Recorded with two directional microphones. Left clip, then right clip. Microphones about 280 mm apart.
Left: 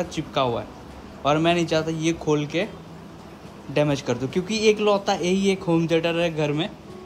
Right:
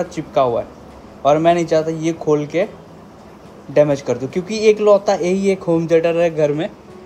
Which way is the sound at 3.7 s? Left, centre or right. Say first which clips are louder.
Right 8 dB; centre.